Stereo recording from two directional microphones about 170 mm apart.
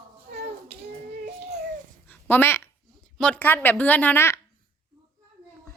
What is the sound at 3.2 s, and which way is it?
A woman's voice, 10° left (ahead or behind).